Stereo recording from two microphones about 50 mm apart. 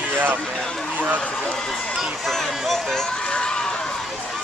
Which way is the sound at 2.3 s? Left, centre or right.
Centre.